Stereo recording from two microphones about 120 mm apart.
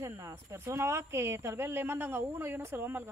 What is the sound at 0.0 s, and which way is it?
A woman's voice, 20° right (ahead or behind).